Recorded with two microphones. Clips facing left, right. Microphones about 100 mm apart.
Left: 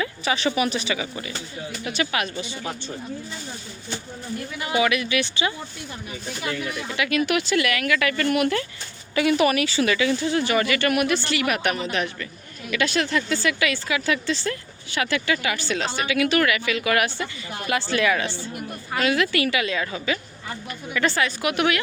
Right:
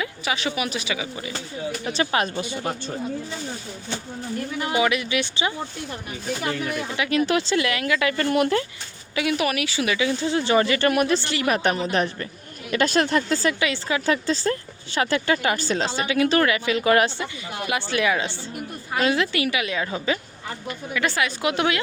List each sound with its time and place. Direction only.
0.0 s a woman's voice: 5° right (ahead or behind)
1.8 s speech: 30° right (ahead or behind)
2.3 s speech: 50° right (ahead or behind)
4.7 s speech: 20° right (ahead or behind)
6.4 s speech: 50° right (ahead or behind)
6.9 s speech: 25° right (ahead or behind)
9.1 s speech: centre (ahead or behind); by 13.6 s 35° right (ahead or behind)
13.6 s speech: 25° right (ahead or behind)
17.7 s speech: 15° right (ahead or behind)
20.9 s speech: 10° right (ahead or behind)
21.4 s speech: 25° right (ahead or behind)